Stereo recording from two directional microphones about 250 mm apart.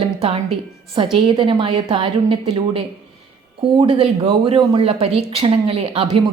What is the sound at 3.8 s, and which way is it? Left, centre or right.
Speech, right.